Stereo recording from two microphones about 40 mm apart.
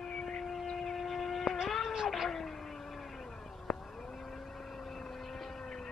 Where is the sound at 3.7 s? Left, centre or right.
Centre.